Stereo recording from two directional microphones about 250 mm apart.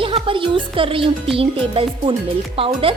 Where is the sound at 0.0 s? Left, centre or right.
Right.